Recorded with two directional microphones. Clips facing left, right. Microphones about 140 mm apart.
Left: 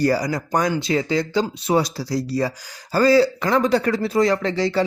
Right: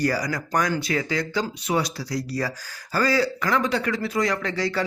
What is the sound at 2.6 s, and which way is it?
Speech, 15° left (ahead or behind).